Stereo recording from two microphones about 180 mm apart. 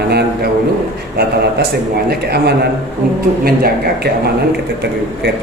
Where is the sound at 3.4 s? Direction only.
60° right (ahead or behind).